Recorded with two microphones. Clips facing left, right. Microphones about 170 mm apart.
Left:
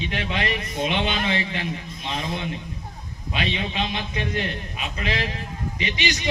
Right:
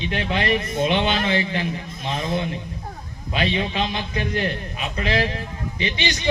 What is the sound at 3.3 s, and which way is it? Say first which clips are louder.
A man's voice: right 4 dB; 35° right (ahead or behind).